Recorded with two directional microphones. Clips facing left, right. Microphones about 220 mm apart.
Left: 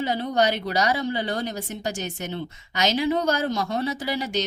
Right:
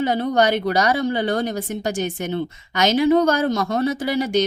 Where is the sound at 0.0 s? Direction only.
50° right (ahead or behind).